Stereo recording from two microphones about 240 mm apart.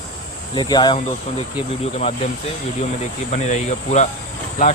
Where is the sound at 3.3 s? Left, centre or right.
Left.